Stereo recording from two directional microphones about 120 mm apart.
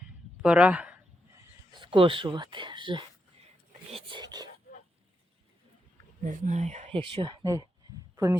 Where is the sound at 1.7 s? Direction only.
45° right (ahead or behind).